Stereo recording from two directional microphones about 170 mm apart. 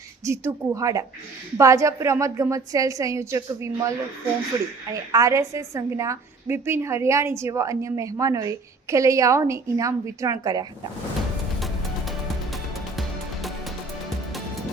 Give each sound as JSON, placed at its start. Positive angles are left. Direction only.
{"t": 0.3, "sound": "a woman's voice", "side_deg": -15}
{"t": 11.6, "sound": "music", "side_deg": 0}